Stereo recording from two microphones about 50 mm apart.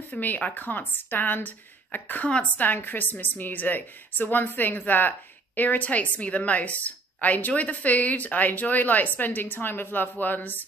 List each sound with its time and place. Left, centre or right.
0.2 s a woman's voice: left
2.6 s a woman's voice: left